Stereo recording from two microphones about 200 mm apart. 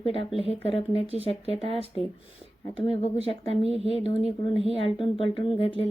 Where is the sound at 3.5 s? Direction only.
30° right (ahead or behind).